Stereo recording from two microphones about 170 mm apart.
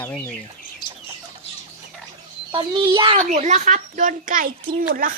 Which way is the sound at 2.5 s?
25° right (ahead or behind).